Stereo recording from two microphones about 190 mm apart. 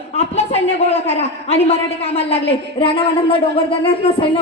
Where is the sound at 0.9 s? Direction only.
35° left (ahead or behind).